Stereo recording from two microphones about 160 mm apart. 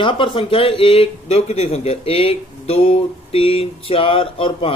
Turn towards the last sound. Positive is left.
turn(degrees=35)  # may be behind; listen again after turning